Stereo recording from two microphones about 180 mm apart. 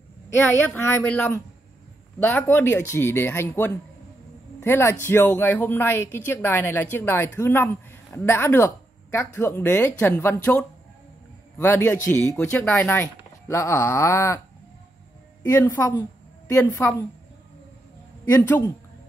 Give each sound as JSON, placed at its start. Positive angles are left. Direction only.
{"t": 0.7, "sound": "a man's voice", "side_deg": 10}
{"t": 15.4, "sound": "speech", "side_deg": 15}
{"t": 18.2, "sound": "a man's voice", "side_deg": 15}